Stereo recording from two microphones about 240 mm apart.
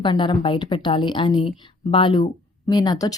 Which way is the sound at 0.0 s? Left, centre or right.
Centre.